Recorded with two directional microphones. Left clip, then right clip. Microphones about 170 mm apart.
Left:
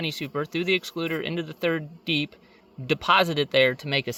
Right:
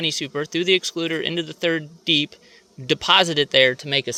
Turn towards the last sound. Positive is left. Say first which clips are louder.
# right 4 dB
turn(degrees=5)  # may be behind; listen again after turning